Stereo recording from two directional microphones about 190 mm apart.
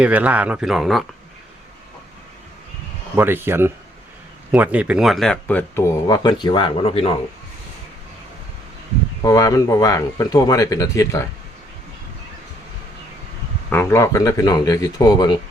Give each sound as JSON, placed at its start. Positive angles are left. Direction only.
{"t": 0.0, "sound": "speech", "side_deg": -10}
{"t": 3.2, "sound": "speech", "side_deg": -10}
{"t": 9.2, "sound": "speech", "side_deg": 15}
{"t": 13.7, "sound": "speech", "side_deg": 15}